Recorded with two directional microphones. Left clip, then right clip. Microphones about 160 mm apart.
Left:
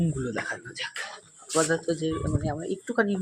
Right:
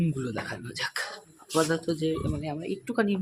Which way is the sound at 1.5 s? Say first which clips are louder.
Left 1 dB; 15° right (ahead or behind).